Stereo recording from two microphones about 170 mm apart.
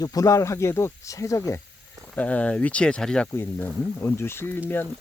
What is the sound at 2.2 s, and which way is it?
Speech, 10° left (ahead or behind).